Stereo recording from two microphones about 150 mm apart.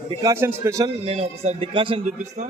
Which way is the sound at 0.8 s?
40° right (ahead or behind).